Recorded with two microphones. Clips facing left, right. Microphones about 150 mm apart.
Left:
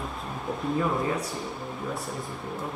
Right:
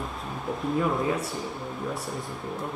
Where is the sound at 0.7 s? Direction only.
Centre (ahead or behind).